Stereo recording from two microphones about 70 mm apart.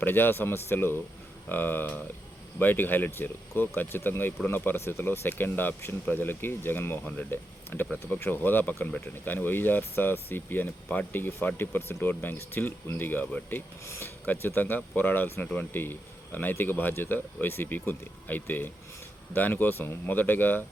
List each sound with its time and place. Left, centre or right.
0.0 s speech: left
13.8 s speech: left
14.3 s speech: left